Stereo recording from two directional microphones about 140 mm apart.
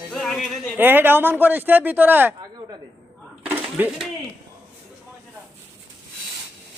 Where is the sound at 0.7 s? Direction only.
15° right (ahead or behind).